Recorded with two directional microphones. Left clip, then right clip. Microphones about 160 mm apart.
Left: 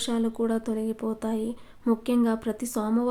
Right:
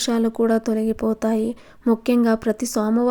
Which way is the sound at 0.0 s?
40° right (ahead or behind).